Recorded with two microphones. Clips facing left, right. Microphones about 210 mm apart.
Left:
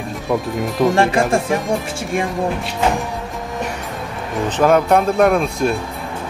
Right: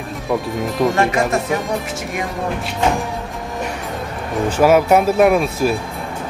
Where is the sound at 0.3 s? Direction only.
Centre (ahead or behind).